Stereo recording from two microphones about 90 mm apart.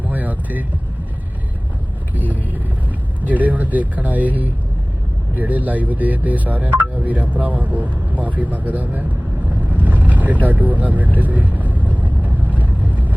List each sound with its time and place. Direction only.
0.1 s vehicle: 20° right (ahead or behind)
2.1 s speech: 20° right (ahead or behind)
9.7 s vehicle: 15° right (ahead or behind)
10.4 s speech: 20° right (ahead or behind)
11.2 s vehicle: 15° right (ahead or behind)